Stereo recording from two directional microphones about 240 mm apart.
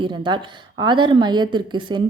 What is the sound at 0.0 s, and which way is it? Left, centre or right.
A woman's voice, centre.